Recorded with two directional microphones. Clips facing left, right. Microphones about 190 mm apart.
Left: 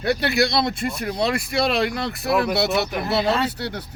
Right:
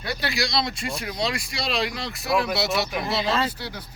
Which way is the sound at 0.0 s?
60° left (ahead or behind).